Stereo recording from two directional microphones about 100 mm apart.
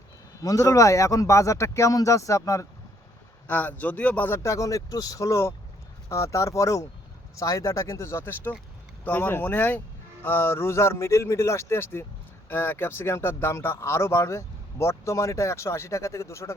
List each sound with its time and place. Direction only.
0.4 s speech: 35° left (ahead or behind)
3.4 s a man's voice: 15° left (ahead or behind)
4.4 s speech: 30° left (ahead or behind)